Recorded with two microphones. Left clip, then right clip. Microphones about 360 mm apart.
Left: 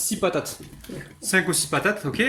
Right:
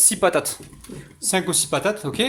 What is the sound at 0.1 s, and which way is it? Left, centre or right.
Speech, centre.